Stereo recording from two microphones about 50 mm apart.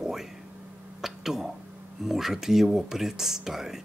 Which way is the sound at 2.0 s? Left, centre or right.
Centre.